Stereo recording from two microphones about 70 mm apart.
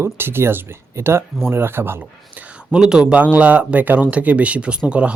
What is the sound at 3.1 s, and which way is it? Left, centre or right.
Speech, right.